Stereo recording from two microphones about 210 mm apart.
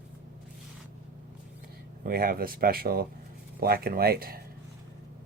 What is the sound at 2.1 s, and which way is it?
Speech, 45° right (ahead or behind).